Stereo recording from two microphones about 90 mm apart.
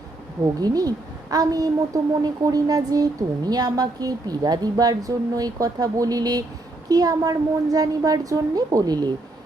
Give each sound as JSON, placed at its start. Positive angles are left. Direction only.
{"t": 0.4, "sound": "a woman's voice", "side_deg": -45}